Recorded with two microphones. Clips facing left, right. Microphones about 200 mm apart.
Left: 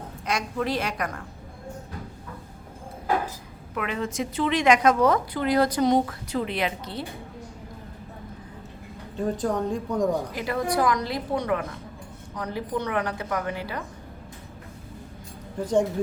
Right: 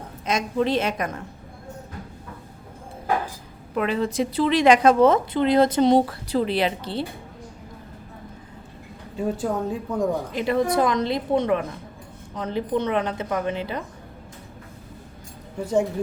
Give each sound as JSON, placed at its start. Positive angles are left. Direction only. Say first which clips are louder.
{"t": 0.3, "sound": "a woman's voice", "louder": "right 5 dB", "side_deg": -20}
{"t": 3.8, "sound": "a woman's voice", "louder": "right 6 dB", "side_deg": -35}
{"t": 9.1, "sound": "speech", "louder": "right 1 dB", "side_deg": -10}
{"t": 10.3, "sound": "a woman's voice", "louder": "right 4 dB", "side_deg": -25}